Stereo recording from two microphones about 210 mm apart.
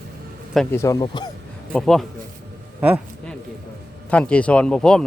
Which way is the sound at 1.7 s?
5° left (ahead or behind).